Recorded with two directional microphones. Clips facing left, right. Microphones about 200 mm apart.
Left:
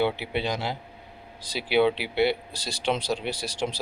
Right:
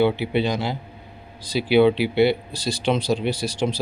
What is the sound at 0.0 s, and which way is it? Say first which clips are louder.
Speech: right 6 dB; 10° left (ahead or behind).